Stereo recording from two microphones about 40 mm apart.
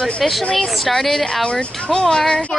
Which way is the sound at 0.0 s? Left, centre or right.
Centre.